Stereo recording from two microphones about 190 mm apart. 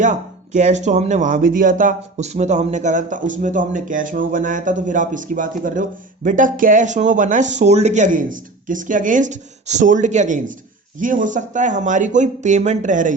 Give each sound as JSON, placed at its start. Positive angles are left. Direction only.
{"t": 0.0, "sound": "speech", "side_deg": -40}